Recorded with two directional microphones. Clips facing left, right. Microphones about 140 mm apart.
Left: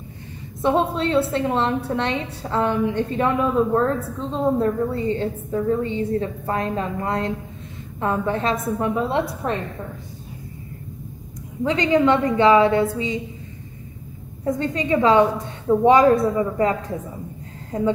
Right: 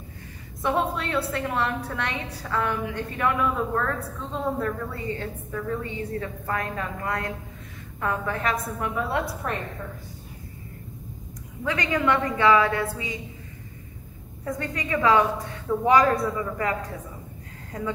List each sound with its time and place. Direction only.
0.6 s a woman's voice: 25° left (ahead or behind)
11.6 s a woman's voice: 25° left (ahead or behind)
14.4 s a woman's voice: 25° left (ahead or behind)